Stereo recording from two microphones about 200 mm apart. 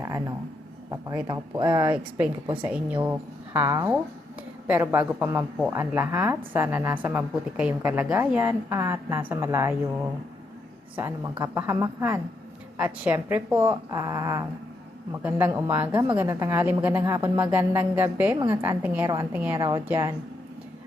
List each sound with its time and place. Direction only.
0.0 s a sound: 15° right (ahead or behind)
0.9 s speech: 20° right (ahead or behind)
1.9 s a woman's voice: 10° right (ahead or behind)
19.0 s speech: 20° right (ahead or behind)
19.3 s a woman's voice: 10° right (ahead or behind)